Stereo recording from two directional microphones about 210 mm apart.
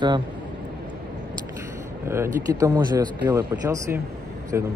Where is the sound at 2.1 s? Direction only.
15° right (ahead or behind).